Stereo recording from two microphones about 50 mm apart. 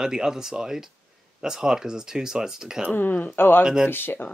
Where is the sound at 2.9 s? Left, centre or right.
Left.